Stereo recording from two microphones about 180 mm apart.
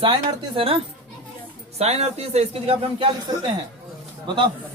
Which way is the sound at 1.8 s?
35° right (ahead or behind).